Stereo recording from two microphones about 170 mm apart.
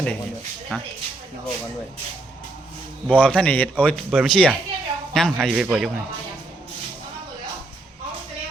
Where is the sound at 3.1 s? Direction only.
10° left (ahead or behind).